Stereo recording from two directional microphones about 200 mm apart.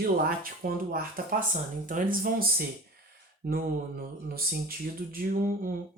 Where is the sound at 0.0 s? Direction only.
45° right (ahead or behind).